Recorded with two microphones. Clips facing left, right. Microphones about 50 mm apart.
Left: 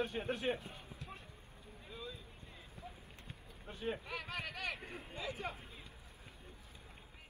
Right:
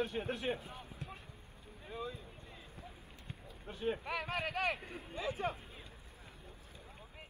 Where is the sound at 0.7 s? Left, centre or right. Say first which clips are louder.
Right 2 dB; right.